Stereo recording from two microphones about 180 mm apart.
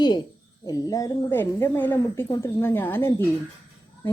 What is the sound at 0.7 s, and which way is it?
A woman's voice, 20° left (ahead or behind).